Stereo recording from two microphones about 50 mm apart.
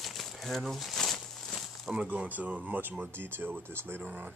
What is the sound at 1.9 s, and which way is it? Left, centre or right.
Speech, right.